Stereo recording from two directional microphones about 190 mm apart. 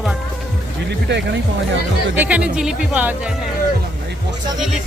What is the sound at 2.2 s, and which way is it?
Speech, 5° right (ahead or behind).